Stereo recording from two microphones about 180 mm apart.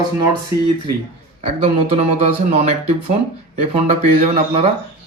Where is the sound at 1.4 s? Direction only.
35° right (ahead or behind).